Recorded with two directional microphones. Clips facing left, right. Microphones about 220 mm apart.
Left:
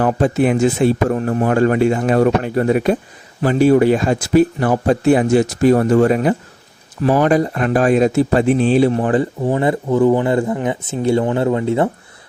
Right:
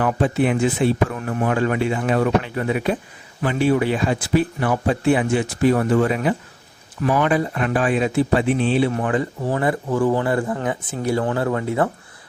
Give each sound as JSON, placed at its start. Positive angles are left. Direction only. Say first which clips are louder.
{"t": 0.0, "sound": "speech", "louder": "left 4 dB", "side_deg": 40}